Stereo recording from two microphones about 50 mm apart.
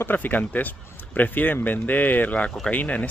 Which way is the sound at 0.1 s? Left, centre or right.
Left.